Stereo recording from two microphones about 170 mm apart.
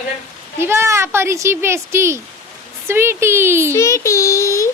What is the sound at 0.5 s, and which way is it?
A child's voice, 15° right (ahead or behind).